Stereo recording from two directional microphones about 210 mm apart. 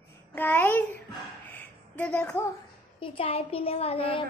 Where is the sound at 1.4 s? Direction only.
5° left (ahead or behind).